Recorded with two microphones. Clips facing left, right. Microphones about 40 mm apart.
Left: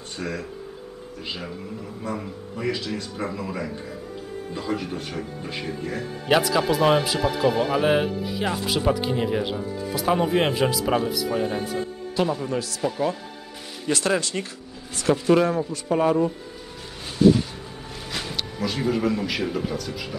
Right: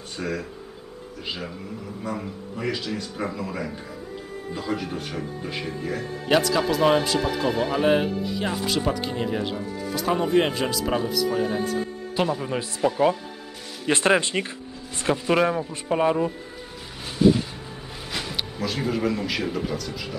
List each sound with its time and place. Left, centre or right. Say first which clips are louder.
0.2 s speech: right 1 dB; centre
12.4 s speech: left 1 dB; right
13.8 s speech: right 3 dB; right
17.0 s a sound: left 2 dB; centre
18.1 s a man's voice: even; centre